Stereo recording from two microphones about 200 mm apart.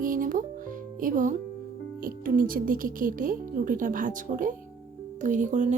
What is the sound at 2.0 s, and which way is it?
Speech, 45° right (ahead or behind).